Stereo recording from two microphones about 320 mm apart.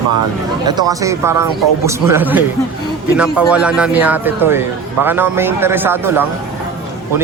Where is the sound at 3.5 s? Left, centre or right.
Centre.